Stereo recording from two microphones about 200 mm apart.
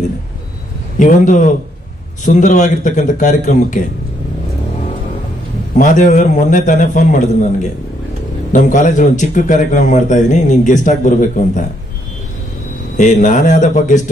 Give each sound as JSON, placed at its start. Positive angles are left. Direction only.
{"t": 0.9, "sound": "a man's voice", "side_deg": 40}
{"t": 5.8, "sound": "a man's voice", "side_deg": 40}
{"t": 8.5, "sound": "a man's voice", "side_deg": 40}
{"t": 12.9, "sound": "a man's voice", "side_deg": 40}